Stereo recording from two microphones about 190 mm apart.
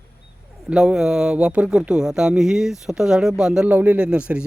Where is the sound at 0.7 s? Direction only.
5° right (ahead or behind).